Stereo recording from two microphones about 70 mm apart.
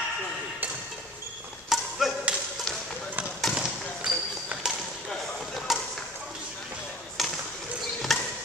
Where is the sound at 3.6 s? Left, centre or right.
Centre.